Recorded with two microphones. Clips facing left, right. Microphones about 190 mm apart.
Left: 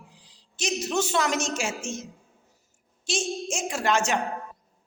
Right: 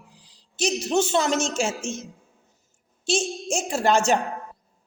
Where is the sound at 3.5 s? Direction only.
35° right (ahead or behind).